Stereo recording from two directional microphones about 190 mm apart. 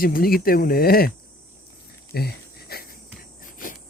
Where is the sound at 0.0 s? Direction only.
50° left (ahead or behind).